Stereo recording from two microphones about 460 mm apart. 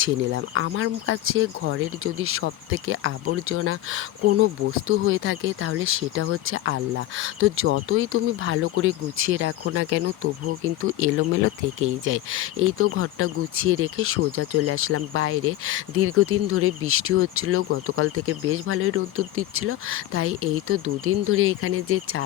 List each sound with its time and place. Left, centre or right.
0.0 s speech: right